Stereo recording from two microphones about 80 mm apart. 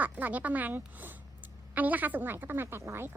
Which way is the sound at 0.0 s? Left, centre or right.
Right.